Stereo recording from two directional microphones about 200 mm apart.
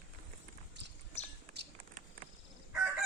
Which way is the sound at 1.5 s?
55° right (ahead or behind).